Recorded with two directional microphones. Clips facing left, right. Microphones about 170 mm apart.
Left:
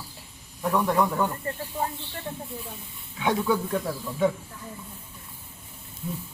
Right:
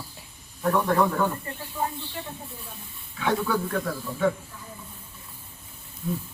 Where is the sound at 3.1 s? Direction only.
20° left (ahead or behind).